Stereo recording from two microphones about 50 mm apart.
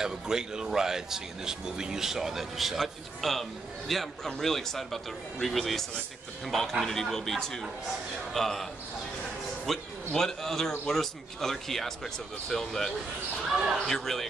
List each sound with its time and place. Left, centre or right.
0.0 s a man's voice: centre
9.7 s a man's voice: centre